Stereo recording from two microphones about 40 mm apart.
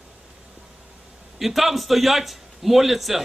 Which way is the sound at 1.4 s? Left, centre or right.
Centre.